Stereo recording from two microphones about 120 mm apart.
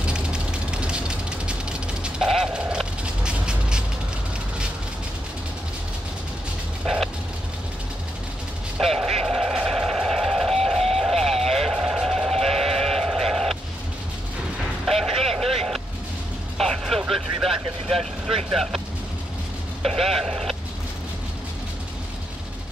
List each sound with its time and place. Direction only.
0.0 s vehicle: 10° right (ahead or behind)
8.7 s a sound: centre (ahead or behind)
12.7 s sheep: centre (ahead or behind)
14.9 s vehicle: centre (ahead or behind)
19.8 s sheep: centre (ahead or behind)